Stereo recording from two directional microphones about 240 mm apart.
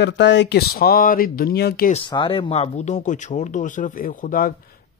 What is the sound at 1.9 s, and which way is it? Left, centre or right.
Speech, centre.